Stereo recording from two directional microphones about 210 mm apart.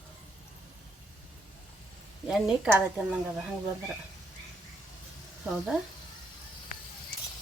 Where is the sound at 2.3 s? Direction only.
Centre (ahead or behind).